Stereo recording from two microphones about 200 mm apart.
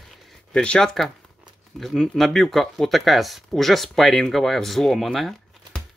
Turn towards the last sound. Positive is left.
turn(degrees=0)  # may be behind; listen again after turning